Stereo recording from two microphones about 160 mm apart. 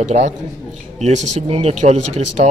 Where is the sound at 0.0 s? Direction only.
50° right (ahead or behind).